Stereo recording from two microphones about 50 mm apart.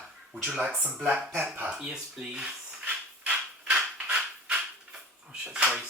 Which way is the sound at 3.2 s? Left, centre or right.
Right.